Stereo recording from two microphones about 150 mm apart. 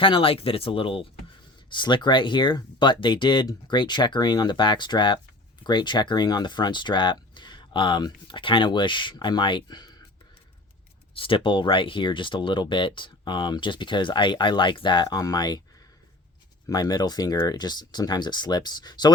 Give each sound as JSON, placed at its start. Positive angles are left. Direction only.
{"t": 0.0, "sound": "speech", "side_deg": 35}
{"t": 11.1, "sound": "speech", "side_deg": 35}
{"t": 16.6, "sound": "speech", "side_deg": 25}